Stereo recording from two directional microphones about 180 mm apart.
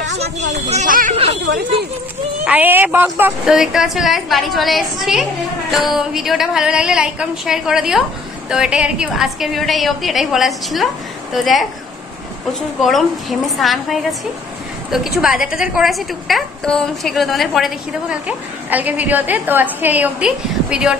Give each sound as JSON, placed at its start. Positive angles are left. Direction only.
{"t": 0.7, "sound": "a sound", "side_deg": -45}
{"t": 2.4, "sound": "a woman's voice", "side_deg": -10}
{"t": 12.8, "sound": "a woman's voice", "side_deg": 0}